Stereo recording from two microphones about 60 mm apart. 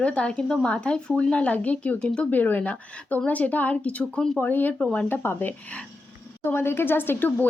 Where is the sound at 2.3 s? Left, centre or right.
Left.